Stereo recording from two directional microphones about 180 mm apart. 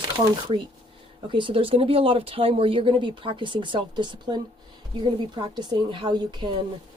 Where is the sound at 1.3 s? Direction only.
30° right (ahead or behind).